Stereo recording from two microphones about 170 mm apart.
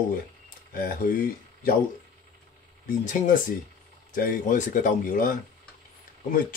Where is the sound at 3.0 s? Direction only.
50° left (ahead or behind).